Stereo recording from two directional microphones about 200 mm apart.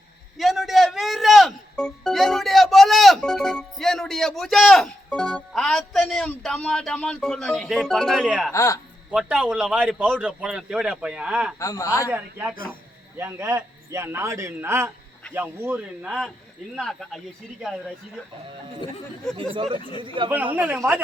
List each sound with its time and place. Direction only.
0.3 s music: centre (ahead or behind)
8.5 s a man's voice: 15° left (ahead or behind)
9.0 s a man's voice: 5° right (ahead or behind)
11.6 s a man's voice: 15° left (ahead or behind)
12.1 s a man's voice: 10° right (ahead or behind)
19.4 s speech: 25° right (ahead or behind)
20.6 s a man's voice: 10° right (ahead or behind)